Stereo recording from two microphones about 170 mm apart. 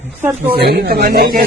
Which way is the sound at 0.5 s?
65° right (ahead or behind).